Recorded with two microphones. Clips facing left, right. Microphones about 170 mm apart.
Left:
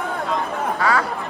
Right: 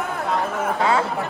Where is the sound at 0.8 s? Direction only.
25° right (ahead or behind).